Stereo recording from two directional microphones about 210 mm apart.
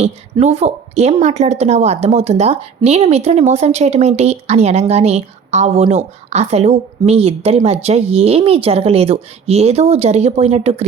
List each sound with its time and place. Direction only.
0.0 s a woman's voice: 30° right (ahead or behind)